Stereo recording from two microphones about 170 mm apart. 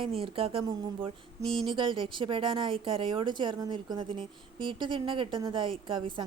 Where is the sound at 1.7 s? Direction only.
30° right (ahead or behind).